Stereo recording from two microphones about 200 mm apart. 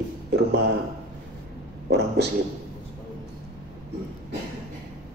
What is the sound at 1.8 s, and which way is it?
Speech, 55° right (ahead or behind).